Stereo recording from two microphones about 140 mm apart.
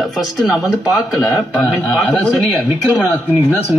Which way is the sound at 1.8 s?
Centre (ahead or behind).